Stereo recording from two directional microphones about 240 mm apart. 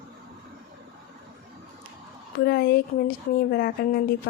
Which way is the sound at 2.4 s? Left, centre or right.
Left.